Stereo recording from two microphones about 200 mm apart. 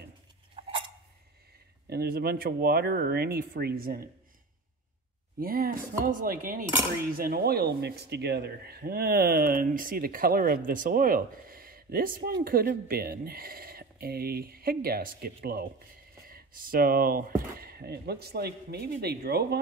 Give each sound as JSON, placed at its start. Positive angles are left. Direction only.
{"t": 0.6, "sound": "a sound", "side_deg": -25}
{"t": 1.9, "sound": "speech", "side_deg": -50}
{"t": 5.4, "sound": "speech", "side_deg": -45}